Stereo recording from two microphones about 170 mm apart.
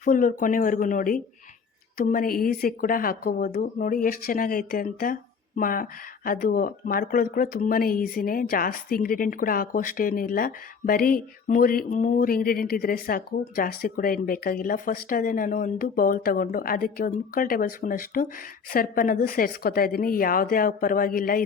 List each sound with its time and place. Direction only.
0.0 s speech: 50° left (ahead or behind)